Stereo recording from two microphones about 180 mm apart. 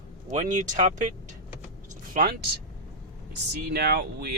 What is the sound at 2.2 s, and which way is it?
Speech, 55° right (ahead or behind).